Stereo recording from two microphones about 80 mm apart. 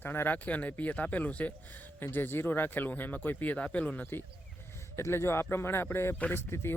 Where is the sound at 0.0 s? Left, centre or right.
Left.